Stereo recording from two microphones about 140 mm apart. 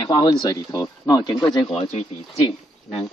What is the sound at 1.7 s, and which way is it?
Speech, 50° left (ahead or behind).